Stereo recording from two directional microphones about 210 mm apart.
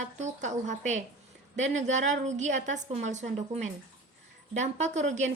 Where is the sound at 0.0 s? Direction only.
35° right (ahead or behind).